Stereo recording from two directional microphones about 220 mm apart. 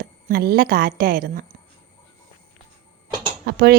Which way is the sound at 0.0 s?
45° right (ahead or behind).